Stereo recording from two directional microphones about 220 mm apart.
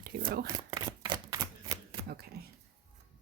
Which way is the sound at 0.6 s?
15° right (ahead or behind).